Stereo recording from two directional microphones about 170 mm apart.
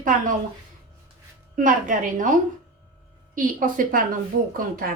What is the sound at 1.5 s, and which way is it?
A woman's voice, 50° right (ahead or behind).